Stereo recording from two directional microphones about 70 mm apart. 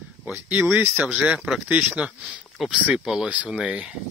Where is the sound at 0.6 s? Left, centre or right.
Right.